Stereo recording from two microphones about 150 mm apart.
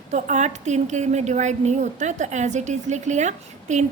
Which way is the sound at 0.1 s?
50° right (ahead or behind).